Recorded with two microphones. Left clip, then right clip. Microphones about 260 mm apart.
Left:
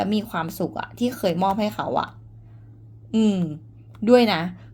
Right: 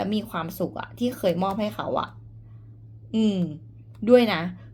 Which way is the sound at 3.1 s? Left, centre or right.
Left.